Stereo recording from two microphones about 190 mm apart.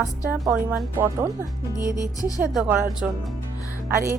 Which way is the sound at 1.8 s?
20° left (ahead or behind).